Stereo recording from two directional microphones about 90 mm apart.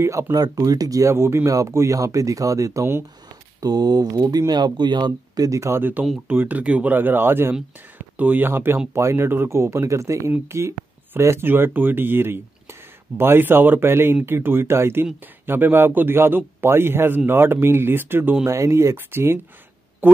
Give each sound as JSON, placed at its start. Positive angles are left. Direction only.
{"t": 0.0, "sound": "speech", "side_deg": -30}
{"t": 3.6, "sound": "speech", "side_deg": -45}